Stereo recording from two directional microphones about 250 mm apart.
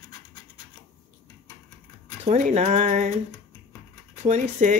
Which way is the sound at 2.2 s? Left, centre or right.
Right.